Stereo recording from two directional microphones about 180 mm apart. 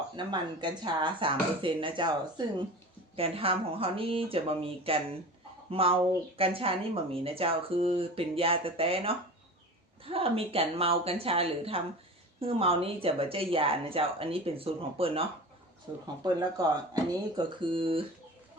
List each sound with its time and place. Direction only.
0.2 s a woman's voice: 25° right (ahead or behind)